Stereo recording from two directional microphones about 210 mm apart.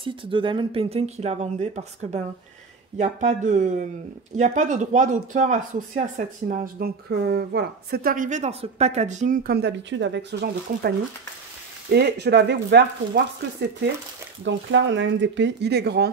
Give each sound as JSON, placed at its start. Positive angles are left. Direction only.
{"t": 0.0, "sound": "speech", "side_deg": -25}
{"t": 11.9, "sound": "speech", "side_deg": -50}